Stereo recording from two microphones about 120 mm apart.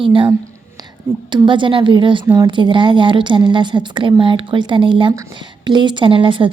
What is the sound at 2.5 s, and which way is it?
A woman's voice, 40° right (ahead or behind).